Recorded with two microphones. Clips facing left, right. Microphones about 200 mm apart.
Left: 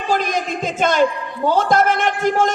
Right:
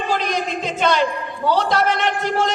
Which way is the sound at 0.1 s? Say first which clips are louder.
Left 4 dB; 50° left (ahead or behind).